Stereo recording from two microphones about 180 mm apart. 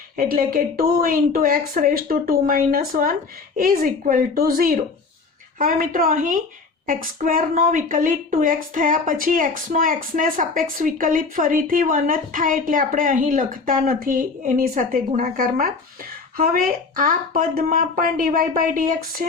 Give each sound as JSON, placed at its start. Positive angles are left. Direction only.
{"t": 0.2, "sound": "a woman's voice", "side_deg": -50}